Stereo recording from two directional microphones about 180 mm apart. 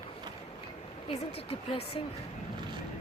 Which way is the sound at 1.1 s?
30° left (ahead or behind).